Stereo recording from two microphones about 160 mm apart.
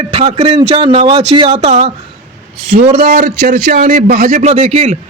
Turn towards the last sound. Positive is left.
turn(degrees=-40)  # may be behind; listen again after turning